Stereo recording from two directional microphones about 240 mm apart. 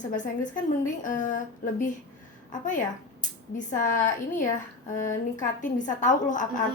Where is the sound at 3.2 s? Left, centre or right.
Left.